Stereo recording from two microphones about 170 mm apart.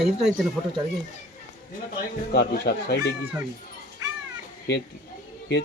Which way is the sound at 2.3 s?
65° left (ahead or behind).